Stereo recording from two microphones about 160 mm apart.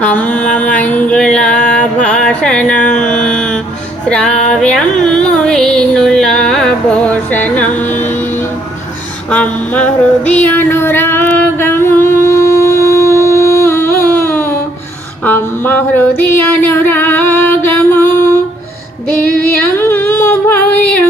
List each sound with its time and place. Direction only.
0.0 s mantra: 10° left (ahead or behind)
4.0 s music: 5° left (ahead or behind)
4.3 s music: 45° left (ahead or behind)
4.6 s a sound: 5° left (ahead or behind)
8.0 s vehicle: 10° left (ahead or behind)
9.3 s female singing: 10° left (ahead or behind)
19.7 s a sound: 15° left (ahead or behind)